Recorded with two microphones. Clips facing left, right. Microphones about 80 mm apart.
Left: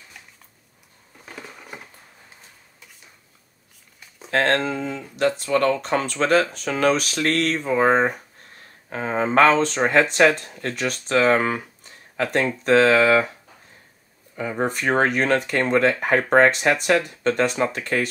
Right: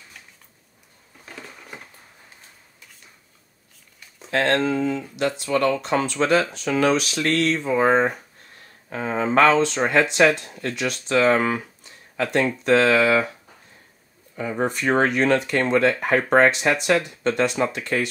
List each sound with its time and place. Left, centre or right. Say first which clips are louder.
1.2 s a sound: left 1 dB; centre
4.3 s speech: even; left
14.3 s speech: even; left